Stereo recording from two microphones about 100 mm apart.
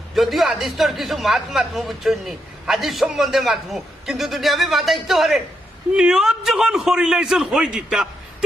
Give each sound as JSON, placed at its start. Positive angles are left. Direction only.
{"t": 0.1, "sound": "a man's voice", "side_deg": 0}